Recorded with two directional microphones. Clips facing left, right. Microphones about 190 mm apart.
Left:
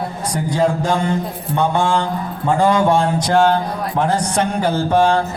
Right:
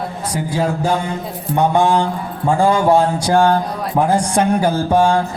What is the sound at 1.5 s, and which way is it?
Music, 15° right (ahead or behind).